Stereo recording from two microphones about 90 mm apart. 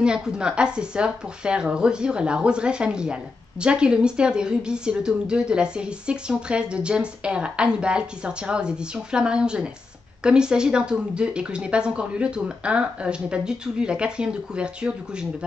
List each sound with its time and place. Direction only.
0.0 s speech: 10° right (ahead or behind)